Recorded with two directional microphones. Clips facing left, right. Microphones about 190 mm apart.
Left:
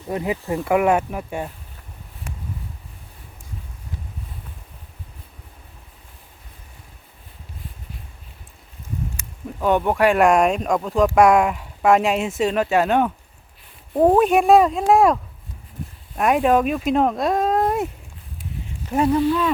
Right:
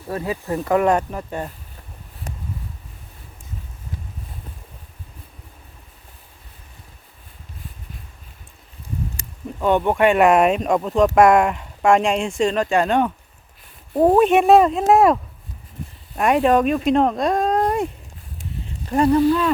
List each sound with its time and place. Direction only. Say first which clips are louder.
0.1 s speech: left 1 dB; 15° left (ahead or behind)
2.3 s a sound: right 1 dB; 35° right (ahead or behind)
9.6 s speech: right 1 dB; 5° left (ahead or behind)
18.9 s speech: right 3 dB; 5° left (ahead or behind)